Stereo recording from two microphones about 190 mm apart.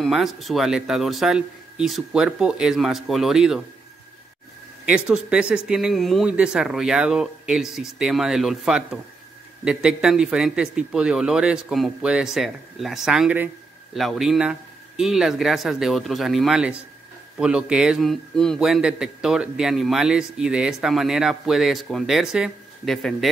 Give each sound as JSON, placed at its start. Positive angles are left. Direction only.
{"t": 0.0, "sound": "a man's voice", "side_deg": 0}
{"t": 4.8, "sound": "a man's voice", "side_deg": -5}